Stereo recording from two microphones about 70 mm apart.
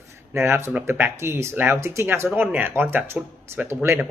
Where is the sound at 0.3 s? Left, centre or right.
Right.